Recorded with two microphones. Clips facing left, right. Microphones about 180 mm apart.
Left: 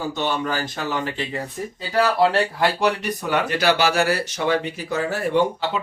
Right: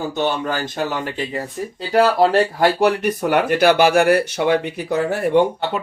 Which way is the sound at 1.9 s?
50° right (ahead or behind).